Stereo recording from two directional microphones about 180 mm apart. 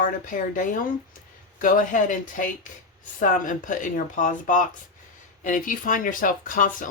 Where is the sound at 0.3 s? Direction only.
45° left (ahead or behind).